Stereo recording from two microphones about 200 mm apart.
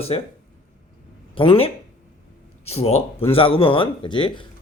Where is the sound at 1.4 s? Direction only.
30° left (ahead or behind).